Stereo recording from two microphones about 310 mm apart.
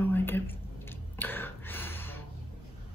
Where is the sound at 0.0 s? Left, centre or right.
Centre.